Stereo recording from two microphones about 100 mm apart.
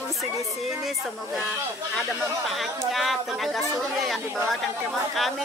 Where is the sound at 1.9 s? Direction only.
Centre (ahead or behind).